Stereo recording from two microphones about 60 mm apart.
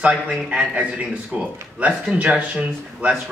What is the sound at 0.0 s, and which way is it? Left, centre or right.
Speech, centre.